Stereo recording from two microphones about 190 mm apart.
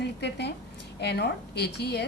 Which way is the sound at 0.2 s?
60° left (ahead or behind).